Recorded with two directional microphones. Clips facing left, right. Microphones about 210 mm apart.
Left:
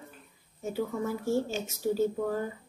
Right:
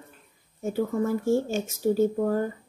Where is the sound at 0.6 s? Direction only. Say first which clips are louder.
Right 5 dB; 50° right (ahead or behind).